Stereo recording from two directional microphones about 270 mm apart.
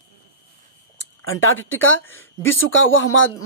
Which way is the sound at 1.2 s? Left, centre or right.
Left.